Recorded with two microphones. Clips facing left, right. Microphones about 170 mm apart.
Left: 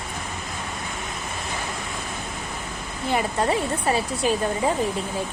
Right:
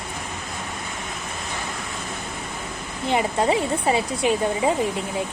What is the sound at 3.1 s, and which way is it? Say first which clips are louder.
Speech: right 2 dB; 20° right (ahead or behind).